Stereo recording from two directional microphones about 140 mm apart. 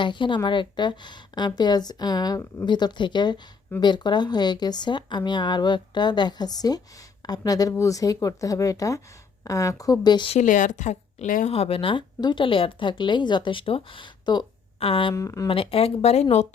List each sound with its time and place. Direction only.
0.0 s speech: 35° left (ahead or behind)
10.3 s speech: 65° left (ahead or behind)
11.5 s speech: 45° left (ahead or behind)
15.1 s speech: 20° left (ahead or behind)
15.4 s speech: 40° left (ahead or behind)